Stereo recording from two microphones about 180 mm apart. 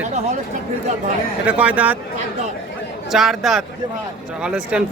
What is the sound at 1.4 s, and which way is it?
Speech, 5° right (ahead or behind).